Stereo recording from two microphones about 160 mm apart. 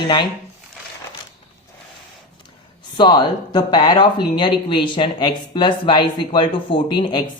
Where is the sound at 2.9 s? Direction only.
30° left (ahead or behind).